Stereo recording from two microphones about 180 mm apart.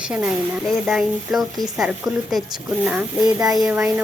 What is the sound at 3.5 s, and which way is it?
Speech, 5° right (ahead or behind).